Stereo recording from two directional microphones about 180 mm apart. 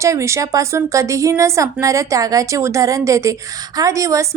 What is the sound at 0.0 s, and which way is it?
A woman's voice, 15° right (ahead or behind).